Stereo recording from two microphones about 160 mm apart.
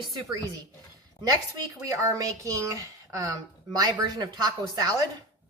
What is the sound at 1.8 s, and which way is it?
A woman's voice, 20° right (ahead or behind).